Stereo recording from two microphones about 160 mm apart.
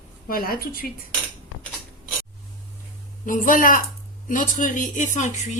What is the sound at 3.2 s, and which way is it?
Speech, 55° left (ahead or behind).